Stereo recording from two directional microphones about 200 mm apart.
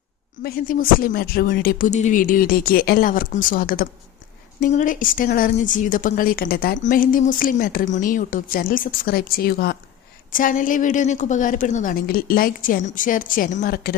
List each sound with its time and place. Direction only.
0.4 s a woman's voice: 45° left (ahead or behind)